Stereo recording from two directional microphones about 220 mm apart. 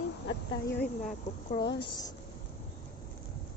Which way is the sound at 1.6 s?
50° left (ahead or behind).